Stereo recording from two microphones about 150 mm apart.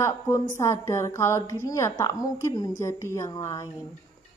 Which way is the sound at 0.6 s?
20° left (ahead or behind).